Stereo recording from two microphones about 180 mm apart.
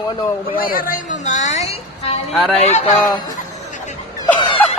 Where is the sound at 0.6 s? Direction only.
50° left (ahead or behind); by 2.2 s 35° left (ahead or behind).